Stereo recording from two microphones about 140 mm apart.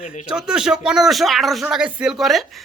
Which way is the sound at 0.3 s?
5° right (ahead or behind).